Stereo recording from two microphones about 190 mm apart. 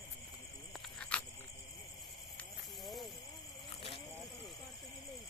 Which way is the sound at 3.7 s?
30° left (ahead or behind).